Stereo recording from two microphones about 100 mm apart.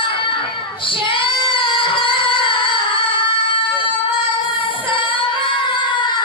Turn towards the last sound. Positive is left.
turn(degrees=50)  # may be behind; listen again after turning